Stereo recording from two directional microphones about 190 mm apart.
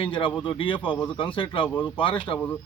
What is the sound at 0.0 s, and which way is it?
Speech, 25° left (ahead or behind).